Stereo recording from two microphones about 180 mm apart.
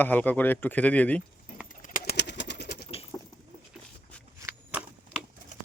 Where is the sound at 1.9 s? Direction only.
60° left (ahead or behind).